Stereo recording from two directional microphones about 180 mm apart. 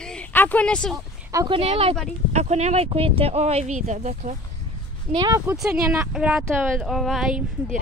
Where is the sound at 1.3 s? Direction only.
25° right (ahead or behind); by 4.4 s 45° right (ahead or behind).